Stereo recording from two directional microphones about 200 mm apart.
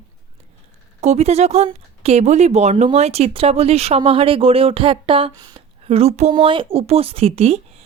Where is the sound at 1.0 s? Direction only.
35° right (ahead or behind).